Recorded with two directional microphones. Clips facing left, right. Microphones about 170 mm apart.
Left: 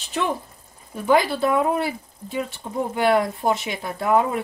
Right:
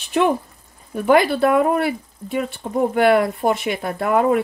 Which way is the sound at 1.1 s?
60° right (ahead or behind).